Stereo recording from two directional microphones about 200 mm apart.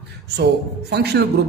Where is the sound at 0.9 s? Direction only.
55° right (ahead or behind).